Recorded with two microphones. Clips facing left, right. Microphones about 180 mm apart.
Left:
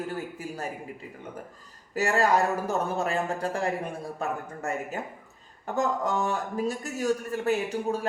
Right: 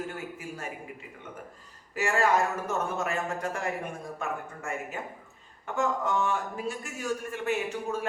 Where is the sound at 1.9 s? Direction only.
40° left (ahead or behind).